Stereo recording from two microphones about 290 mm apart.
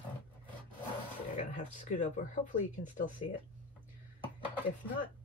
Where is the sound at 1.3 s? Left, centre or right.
Left.